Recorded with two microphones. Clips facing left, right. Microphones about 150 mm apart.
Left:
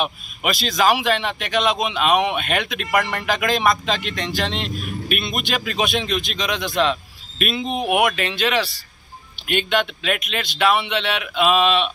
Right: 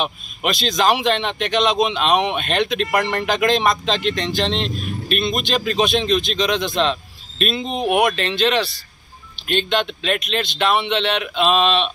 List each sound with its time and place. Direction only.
0.0 s speech: 5° left (ahead or behind)
4.1 s speech: 25° right (ahead or behind)
5.0 s speech: 10° left (ahead or behind)